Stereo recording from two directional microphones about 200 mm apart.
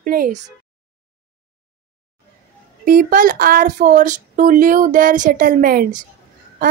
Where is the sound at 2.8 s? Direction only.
45° right (ahead or behind).